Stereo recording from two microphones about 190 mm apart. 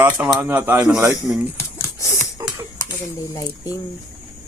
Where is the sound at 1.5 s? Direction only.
15° left (ahead or behind).